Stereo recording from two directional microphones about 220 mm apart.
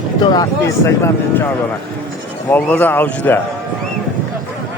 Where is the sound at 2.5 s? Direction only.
10° left (ahead or behind).